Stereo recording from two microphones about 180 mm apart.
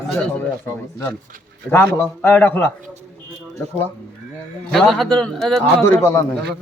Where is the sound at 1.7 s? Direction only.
15° left (ahead or behind).